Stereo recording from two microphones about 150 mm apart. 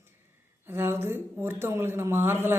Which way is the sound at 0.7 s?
15° right (ahead or behind).